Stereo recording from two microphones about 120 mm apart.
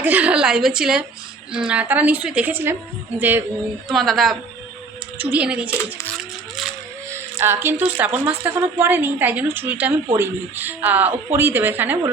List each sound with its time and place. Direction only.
0.0 s a woman's voice: 15° right (ahead or behind)
3.8 s a woman's voice: centre (ahead or behind)
5.1 s a woman's voice: 15° right (ahead or behind)
7.1 s a woman's voice: 20° right (ahead or behind)